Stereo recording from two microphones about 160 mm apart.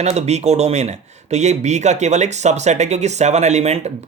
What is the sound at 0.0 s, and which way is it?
Speech, 45° right (ahead or behind).